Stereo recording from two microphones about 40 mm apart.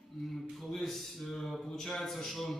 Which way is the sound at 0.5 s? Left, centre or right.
Centre.